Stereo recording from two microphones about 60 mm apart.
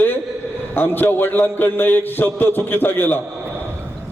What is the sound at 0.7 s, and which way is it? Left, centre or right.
A man's voice, left.